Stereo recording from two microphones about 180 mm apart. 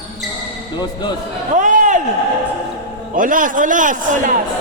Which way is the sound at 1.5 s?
45° right (ahead or behind).